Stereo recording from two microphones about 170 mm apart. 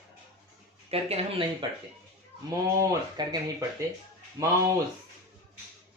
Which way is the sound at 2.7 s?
25° right (ahead or behind).